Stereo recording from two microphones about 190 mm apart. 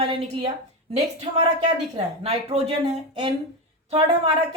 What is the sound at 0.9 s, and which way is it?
Speech, 35° right (ahead or behind).